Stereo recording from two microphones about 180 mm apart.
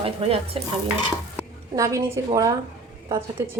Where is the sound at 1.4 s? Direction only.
20° right (ahead or behind).